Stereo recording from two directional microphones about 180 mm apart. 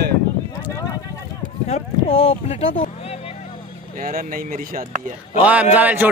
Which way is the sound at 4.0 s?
50° right (ahead or behind).